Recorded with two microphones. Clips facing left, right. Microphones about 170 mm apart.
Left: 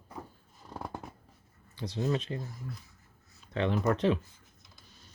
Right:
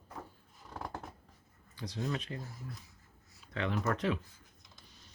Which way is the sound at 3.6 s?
25° left (ahead or behind).